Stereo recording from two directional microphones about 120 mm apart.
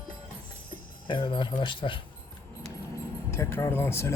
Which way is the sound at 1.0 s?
40° left (ahead or behind).